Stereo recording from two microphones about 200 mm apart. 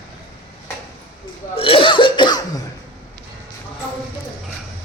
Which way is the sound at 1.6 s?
25° left (ahead or behind).